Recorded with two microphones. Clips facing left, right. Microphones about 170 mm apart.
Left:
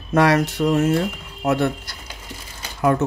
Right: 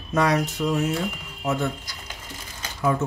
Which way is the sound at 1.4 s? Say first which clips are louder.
Left 6 dB; 70° left (ahead or behind).